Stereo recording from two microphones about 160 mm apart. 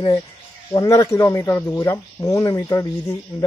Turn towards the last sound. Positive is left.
turn(degrees=20)  # may be behind; listen again after turning